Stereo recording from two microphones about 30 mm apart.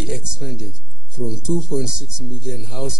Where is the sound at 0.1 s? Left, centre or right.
Right.